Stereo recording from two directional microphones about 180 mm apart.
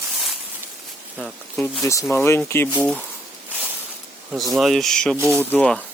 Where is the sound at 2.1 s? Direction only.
15° left (ahead or behind).